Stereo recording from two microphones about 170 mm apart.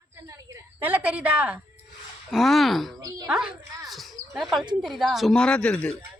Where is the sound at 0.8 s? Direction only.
10° right (ahead or behind).